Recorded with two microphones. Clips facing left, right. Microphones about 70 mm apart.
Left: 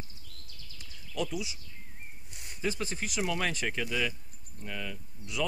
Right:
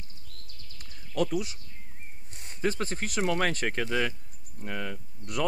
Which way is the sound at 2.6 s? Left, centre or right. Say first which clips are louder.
Right 4 dB; right.